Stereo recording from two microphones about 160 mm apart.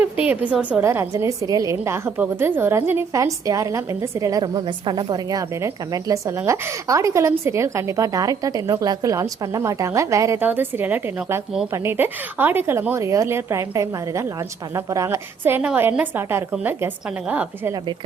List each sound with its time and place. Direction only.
0.0 s a woman's voice: 10° right (ahead or behind)